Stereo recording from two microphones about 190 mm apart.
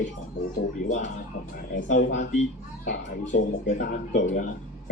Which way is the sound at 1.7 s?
40° left (ahead or behind).